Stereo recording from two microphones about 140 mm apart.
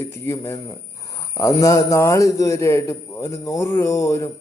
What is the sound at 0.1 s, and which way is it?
A man's voice, 20° left (ahead or behind).